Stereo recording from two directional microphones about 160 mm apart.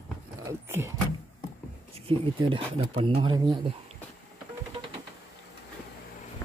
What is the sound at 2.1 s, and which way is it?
Speech, 30° right (ahead or behind).